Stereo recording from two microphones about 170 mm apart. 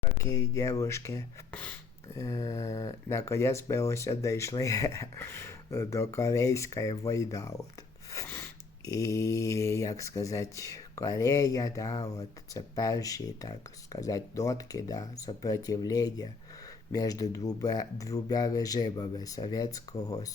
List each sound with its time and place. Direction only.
0.2 s speech: 15° left (ahead or behind)
8.1 s a sound: 15° left (ahead or behind)
8.9 s speech: 20° left (ahead or behind)